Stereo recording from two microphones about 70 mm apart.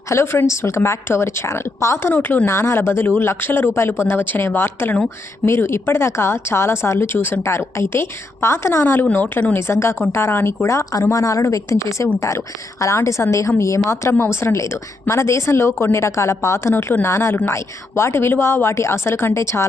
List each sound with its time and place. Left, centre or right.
0.1 s speech: left
2.1 s speech: left
2.5 s speech: left
10.1 s a woman's voice: left